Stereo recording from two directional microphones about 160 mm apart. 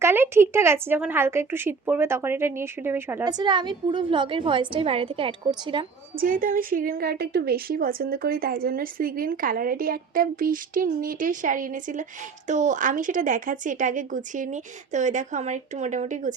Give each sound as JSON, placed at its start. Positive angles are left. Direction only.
{"t": 0.0, "sound": "a woman's voice", "side_deg": -15}
{"t": 3.2, "sound": "a woman's voice", "side_deg": -25}
{"t": 6.1, "sound": "a woman's voice", "side_deg": -60}